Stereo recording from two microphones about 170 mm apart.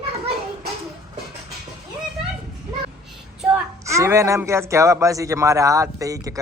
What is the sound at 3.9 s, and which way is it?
A man's voice, 15° right (ahead or behind).